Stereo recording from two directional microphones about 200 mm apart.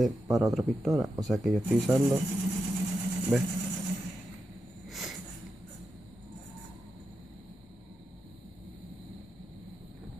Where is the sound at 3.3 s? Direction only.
Centre (ahead or behind).